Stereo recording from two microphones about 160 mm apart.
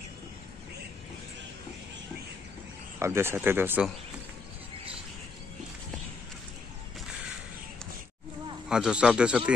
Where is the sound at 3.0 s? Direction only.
15° right (ahead or behind).